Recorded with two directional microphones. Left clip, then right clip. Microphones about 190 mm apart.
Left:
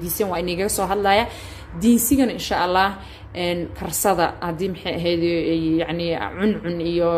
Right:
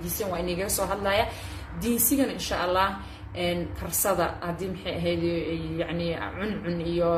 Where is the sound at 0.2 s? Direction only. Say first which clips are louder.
Left 7 dB; 45° left (ahead or behind).